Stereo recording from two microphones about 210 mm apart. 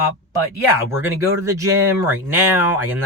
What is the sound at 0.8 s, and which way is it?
Speech, 10° right (ahead or behind).